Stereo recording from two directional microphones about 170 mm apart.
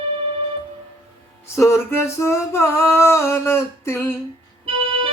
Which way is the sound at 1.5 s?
15° left (ahead or behind).